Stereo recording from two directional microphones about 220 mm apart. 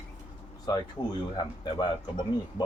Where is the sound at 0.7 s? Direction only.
15° left (ahead or behind).